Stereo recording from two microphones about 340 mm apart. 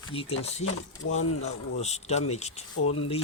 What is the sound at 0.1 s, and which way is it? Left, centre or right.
Speech, centre.